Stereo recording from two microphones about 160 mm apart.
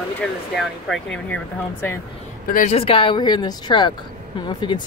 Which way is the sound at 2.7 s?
35° left (ahead or behind).